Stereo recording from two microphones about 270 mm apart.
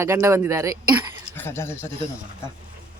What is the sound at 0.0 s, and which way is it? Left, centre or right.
Speech, centre.